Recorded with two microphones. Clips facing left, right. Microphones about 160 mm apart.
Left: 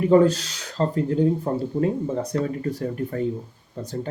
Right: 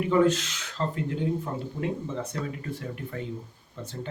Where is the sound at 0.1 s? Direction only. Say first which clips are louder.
Left 5 dB; 35° left (ahead or behind).